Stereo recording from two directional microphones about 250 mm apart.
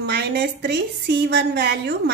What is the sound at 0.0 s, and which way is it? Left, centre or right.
A woman's voice, right.